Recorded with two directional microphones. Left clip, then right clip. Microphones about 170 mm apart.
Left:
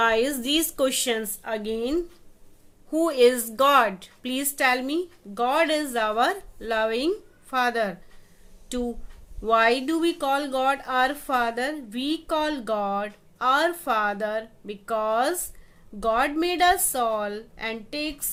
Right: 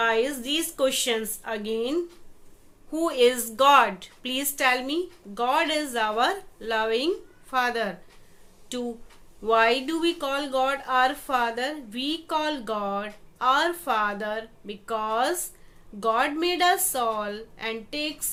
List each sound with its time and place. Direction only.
0.0 s speech: 50° left (ahead or behind); by 18.3 s 30° left (ahead or behind)